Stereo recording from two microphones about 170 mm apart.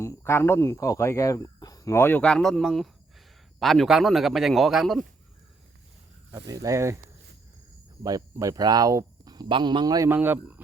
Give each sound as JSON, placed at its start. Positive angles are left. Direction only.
{"t": 0.0, "sound": "speech", "side_deg": 15}
{"t": 6.3, "sound": "speech", "side_deg": -20}
{"t": 8.0, "sound": "speech", "side_deg": -20}
{"t": 10.1, "sound": "speech", "side_deg": -10}